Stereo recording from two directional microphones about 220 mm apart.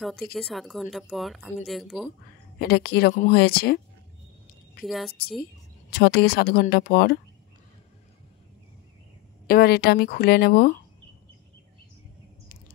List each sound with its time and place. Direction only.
0.0 s speech: centre (ahead or behind)
2.6 s speech: 45° left (ahead or behind)
4.8 s speech: centre (ahead or behind)
5.9 s speech: 45° left (ahead or behind)
9.5 s speech: 45° left (ahead or behind)